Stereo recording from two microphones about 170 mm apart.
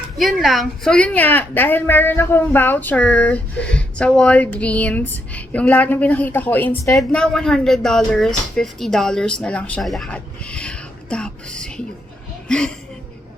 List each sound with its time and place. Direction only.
0.2 s a woman's voice: centre (ahead or behind)